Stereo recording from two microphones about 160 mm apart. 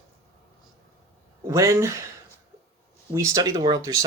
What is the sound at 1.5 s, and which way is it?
Speech, 20° right (ahead or behind).